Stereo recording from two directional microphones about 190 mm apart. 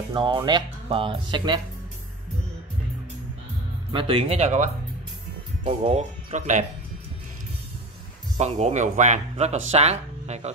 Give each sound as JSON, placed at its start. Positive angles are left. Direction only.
{"t": 0.1, "sound": "speech", "side_deg": -25}
{"t": 3.9, "sound": "speech", "side_deg": -25}
{"t": 8.4, "sound": "speech", "side_deg": -35}